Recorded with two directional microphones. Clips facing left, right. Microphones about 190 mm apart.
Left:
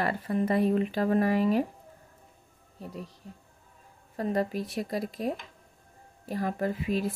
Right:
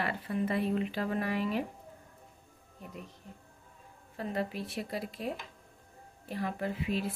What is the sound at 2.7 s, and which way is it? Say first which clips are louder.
Speech: left 6 dB; 35° left (ahead or behind).